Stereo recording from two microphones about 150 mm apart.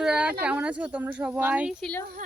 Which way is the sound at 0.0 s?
10° right (ahead or behind).